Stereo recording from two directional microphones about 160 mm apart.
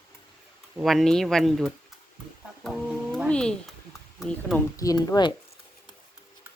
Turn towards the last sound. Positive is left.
turn(degrees=25)  # may be behind; listen again after turning